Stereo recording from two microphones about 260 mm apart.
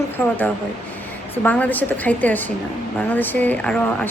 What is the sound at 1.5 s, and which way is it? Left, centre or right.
A woman's voice, centre.